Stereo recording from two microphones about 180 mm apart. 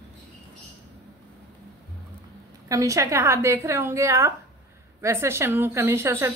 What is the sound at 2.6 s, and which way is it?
A woman's voice, 20° right (ahead or behind).